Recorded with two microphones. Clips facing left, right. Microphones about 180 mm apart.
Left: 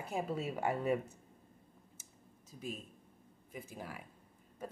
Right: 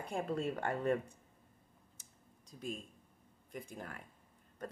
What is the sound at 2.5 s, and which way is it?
Speech, 5° left (ahead or behind).